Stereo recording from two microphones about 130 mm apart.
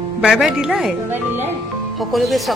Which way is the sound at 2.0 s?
Centre (ahead or behind).